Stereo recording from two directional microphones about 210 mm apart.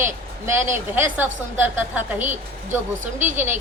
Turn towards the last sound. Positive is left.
turn(degrees=-10)  # may be behind; listen again after turning